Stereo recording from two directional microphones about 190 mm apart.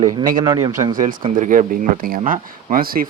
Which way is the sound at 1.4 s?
45° right (ahead or behind).